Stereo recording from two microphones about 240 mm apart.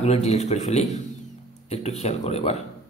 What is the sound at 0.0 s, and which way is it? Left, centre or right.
A man's voice, left.